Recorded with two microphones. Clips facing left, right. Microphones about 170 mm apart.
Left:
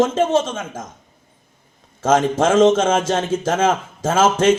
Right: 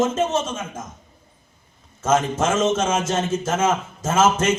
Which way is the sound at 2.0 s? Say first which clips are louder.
Left 4 dB; 90° left.